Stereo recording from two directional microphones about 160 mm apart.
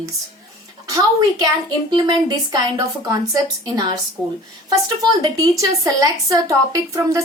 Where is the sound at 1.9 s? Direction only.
25° right (ahead or behind).